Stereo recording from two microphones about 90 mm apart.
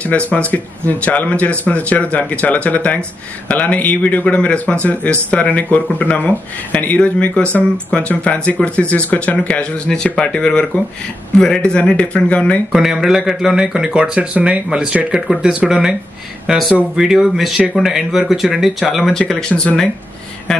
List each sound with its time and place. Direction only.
0.3 s speech: 15° left (ahead or behind)
12.7 s speech: 5° right (ahead or behind); by 19.9 s 10° left (ahead or behind)